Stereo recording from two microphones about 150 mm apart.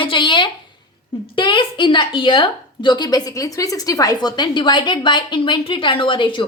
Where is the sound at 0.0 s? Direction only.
35° left (ahead or behind).